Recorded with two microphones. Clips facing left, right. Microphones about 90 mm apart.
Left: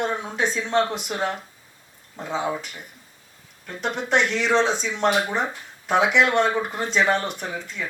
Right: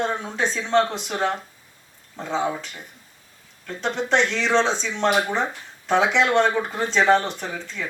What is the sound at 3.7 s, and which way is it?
Speech, 30° right (ahead or behind).